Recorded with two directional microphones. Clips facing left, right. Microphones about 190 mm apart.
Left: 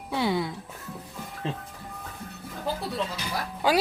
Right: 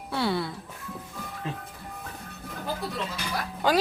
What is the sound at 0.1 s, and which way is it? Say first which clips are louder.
Music: left 1 dB; 15° left (ahead or behind).